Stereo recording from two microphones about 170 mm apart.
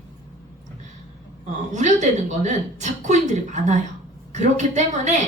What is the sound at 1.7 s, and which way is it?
Speech, 45° right (ahead or behind).